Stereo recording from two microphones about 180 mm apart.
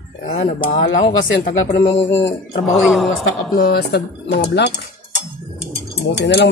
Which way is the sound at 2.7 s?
Centre (ahead or behind).